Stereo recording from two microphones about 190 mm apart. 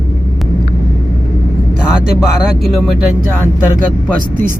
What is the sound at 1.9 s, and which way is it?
Speech, 5° right (ahead or behind).